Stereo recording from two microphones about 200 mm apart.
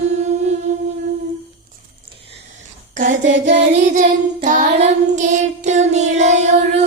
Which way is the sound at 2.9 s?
40° right (ahead or behind).